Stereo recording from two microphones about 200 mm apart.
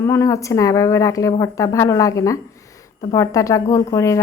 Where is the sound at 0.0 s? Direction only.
15° left (ahead or behind).